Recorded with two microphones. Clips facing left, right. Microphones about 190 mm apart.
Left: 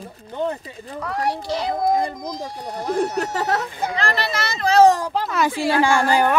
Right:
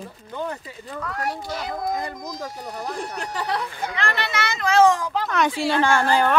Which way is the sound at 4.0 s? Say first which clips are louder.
Left 1 dB; 35° left (ahead or behind).